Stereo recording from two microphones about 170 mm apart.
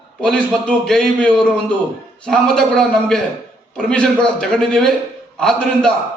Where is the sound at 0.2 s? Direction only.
5° left (ahead or behind).